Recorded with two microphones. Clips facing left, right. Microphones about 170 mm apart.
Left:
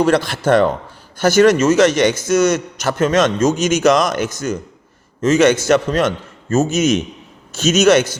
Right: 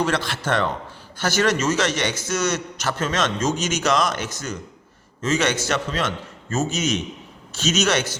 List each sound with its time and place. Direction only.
0.3 s a man's voice: 40° left (ahead or behind)